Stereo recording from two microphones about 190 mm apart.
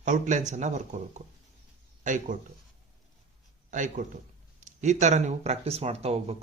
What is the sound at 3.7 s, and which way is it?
Speech, 40° right (ahead or behind).